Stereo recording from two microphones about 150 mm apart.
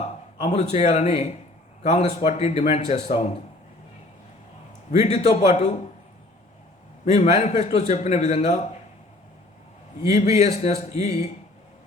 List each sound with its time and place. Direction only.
0.3 s a man's voice: 50° left (ahead or behind)
4.9 s a man's voice: 50° left (ahead or behind)
7.0 s a man's voice: 50° left (ahead or behind)
10.1 s a man's voice: 50° left (ahead or behind)